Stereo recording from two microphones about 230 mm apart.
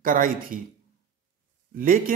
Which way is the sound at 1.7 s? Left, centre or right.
Right.